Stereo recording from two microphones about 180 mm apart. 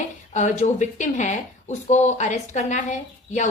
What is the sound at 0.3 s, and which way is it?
Speech, 40° left (ahead or behind).